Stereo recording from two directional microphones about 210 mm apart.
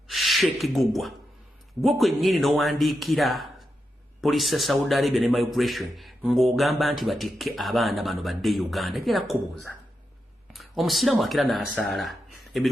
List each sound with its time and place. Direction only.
0.1 s a man's voice: centre (ahead or behind)